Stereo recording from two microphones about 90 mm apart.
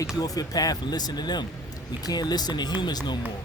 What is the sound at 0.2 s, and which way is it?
Speech, 45° left (ahead or behind).